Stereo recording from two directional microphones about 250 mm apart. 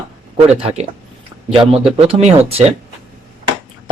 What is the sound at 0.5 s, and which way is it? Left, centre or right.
Speech, right.